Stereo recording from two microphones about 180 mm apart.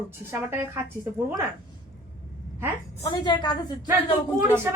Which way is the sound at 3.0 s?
25° left (ahead or behind).